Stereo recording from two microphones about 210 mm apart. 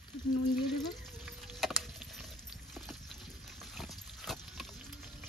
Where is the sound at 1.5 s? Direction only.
Centre (ahead or behind).